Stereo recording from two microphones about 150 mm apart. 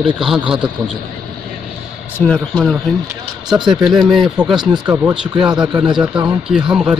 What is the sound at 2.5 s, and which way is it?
Speech, centre (ahead or behind).